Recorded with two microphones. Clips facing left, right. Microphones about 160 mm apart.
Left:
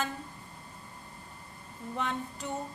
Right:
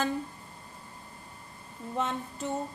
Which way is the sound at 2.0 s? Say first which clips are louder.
Right 3 dB; 25° right (ahead or behind).